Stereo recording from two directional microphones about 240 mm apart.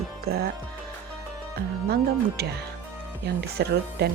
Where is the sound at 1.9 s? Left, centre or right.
Right.